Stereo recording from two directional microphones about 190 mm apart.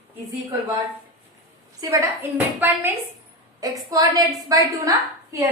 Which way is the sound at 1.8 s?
20° right (ahead or behind).